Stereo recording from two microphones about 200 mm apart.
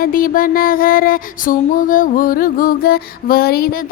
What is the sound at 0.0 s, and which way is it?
Child singing, 45° left (ahead or behind).